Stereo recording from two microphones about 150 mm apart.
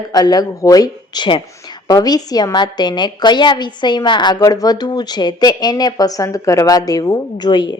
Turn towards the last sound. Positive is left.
turn(degrees=30)  # may be behind; listen again after turning